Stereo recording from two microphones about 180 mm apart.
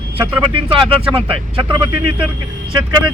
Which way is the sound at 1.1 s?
30° right (ahead or behind).